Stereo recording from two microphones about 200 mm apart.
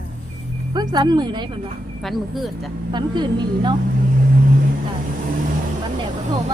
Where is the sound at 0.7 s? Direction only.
20° right (ahead or behind).